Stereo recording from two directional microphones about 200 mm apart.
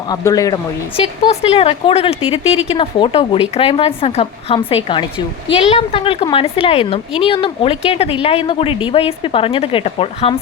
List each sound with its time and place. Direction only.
0.1 s speech: 15° left (ahead or behind)
0.9 s a woman's voice: 30° left (ahead or behind)